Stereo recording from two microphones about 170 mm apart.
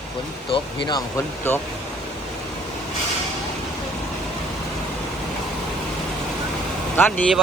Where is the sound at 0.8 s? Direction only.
25° left (ahead or behind).